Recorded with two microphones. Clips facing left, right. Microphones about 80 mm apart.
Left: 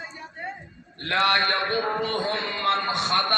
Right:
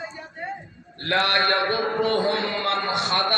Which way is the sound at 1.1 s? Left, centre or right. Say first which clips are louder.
Even; left.